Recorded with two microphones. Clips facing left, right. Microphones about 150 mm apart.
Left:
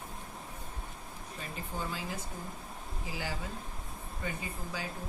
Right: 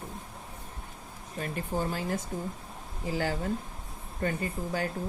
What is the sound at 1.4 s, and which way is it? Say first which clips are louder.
Speech: right 8 dB; 45° right (ahead or behind).